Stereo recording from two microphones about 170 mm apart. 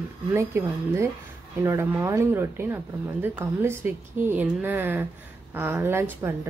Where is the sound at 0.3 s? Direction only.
15° right (ahead or behind).